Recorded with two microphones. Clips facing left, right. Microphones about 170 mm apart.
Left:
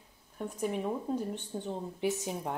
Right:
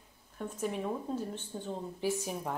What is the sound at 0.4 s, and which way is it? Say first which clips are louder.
A woman's voice: left 2 dB; 10° left (ahead or behind).